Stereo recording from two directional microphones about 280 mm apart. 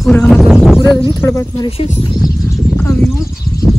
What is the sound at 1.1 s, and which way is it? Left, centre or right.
Speech, centre.